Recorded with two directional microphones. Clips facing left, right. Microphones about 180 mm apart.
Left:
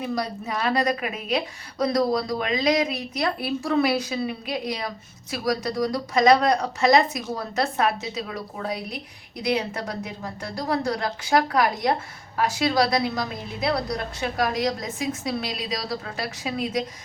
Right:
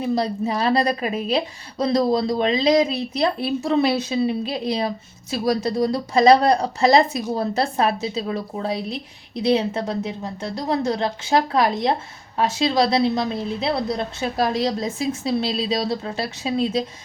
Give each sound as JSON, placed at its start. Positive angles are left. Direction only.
{"t": 0.0, "sound": "a woman's voice", "side_deg": -30}